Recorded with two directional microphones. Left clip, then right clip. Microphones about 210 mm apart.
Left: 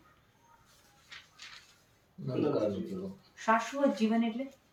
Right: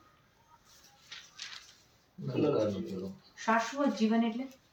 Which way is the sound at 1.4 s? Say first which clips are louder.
Right 6 dB; 45° right (ahead or behind).